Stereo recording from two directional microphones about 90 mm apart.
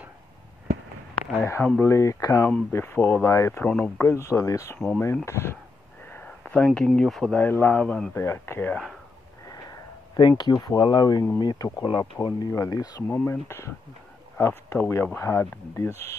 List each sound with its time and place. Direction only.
1.4 s speech: 30° left (ahead or behind)
2.7 s speech: 25° left (ahead or behind)
3.3 s speech: 35° left (ahead or behind)
3.6 s speech: 15° left (ahead or behind)
4.0 s speech: 30° left (ahead or behind)
4.7 s speech: 5° left (ahead or behind)
5.2 s speech: 30° left (ahead or behind)
6.0 s a sound: 20° left (ahead or behind)
7.0 s speech: 5° left (ahead or behind)
7.3 s speech: 25° left (ahead or behind)
7.8 s speech: 10° left (ahead or behind)
8.1 s speech: 30° left (ahead or behind)
9.5 s speech: 45° left (ahead or behind)
13.1 s speech: 30° left (ahead or behind)